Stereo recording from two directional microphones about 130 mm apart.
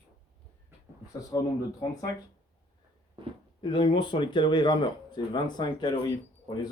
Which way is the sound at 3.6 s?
40° left (ahead or behind).